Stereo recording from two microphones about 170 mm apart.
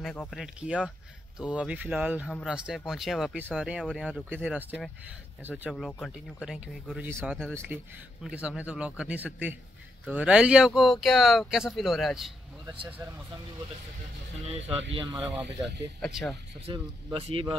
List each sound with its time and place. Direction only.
0.0 s speech: 5° left (ahead or behind)
5.9 s speech: 5° left (ahead or behind)
6.4 s speech: 5° right (ahead or behind)
7.3 s speech: 5° left (ahead or behind)
7.6 s speech: 10° right (ahead or behind)
12.6 s speech: 30° right (ahead or behind)
15.0 s speech: 25° right (ahead or behind)
16.0 s speech: centre (ahead or behind)
16.6 s speech: 35° right (ahead or behind)